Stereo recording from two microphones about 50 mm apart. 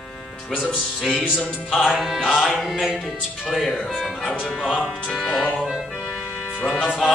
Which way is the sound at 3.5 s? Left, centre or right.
Centre.